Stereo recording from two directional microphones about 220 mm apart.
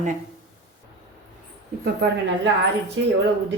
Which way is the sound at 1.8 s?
50° right (ahead or behind).